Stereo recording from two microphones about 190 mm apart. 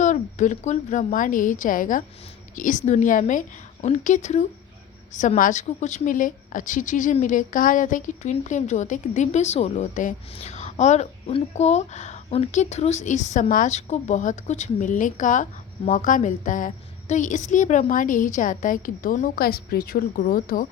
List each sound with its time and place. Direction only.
0.0 s a woman's voice: 40° left (ahead or behind)